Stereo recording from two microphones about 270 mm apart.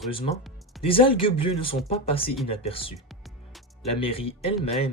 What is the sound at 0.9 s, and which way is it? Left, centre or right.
Speech, centre.